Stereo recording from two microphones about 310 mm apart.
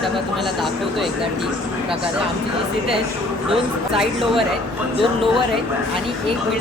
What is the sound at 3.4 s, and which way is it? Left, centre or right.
Speech, centre.